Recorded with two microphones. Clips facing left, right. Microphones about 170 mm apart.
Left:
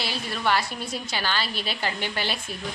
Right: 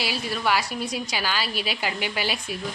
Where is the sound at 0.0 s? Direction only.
10° right (ahead or behind).